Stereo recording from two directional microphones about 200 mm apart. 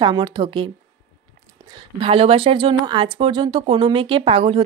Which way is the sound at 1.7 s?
25° right (ahead or behind).